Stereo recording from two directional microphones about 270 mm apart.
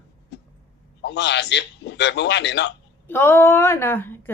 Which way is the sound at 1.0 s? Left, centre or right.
Left.